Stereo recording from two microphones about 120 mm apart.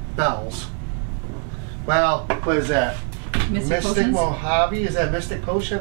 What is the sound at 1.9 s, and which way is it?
Speech, 15° right (ahead or behind).